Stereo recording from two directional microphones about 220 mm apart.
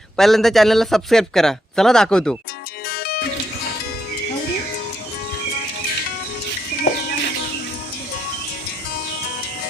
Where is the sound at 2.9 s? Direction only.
45° left (ahead or behind).